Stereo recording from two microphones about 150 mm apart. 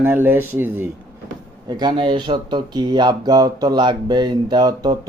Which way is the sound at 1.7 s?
30° right (ahead or behind).